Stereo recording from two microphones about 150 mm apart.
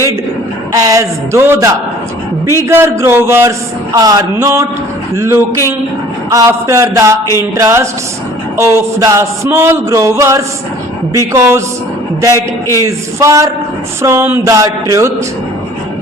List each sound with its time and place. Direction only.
0.7 s a man's voice: 25° right (ahead or behind)
12.3 s a man's voice: 20° left (ahead or behind)
13.1 s speech: 20° right (ahead or behind)